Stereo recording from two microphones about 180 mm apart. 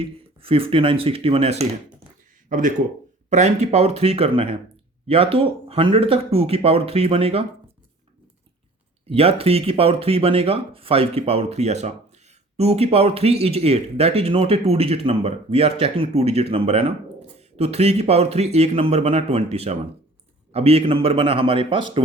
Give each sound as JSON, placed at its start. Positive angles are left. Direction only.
{"t": 0.3, "sound": "speech", "side_deg": -30}
{"t": 9.0, "sound": "a man's voice", "side_deg": -35}